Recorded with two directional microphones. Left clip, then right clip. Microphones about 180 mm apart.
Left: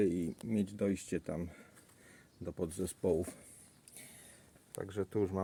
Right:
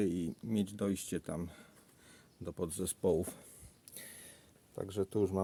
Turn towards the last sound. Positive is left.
turn(degrees=-15)  # may be behind; listen again after turning